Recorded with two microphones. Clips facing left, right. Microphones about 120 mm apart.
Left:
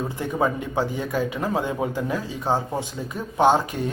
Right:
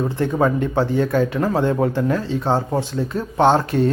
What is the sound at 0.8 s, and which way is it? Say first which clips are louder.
Speech: right 6 dB; 10° left (ahead or behind).